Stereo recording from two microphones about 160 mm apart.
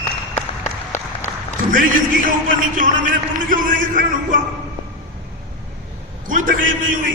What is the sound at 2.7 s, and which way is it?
A man's voice, 60° right (ahead or behind).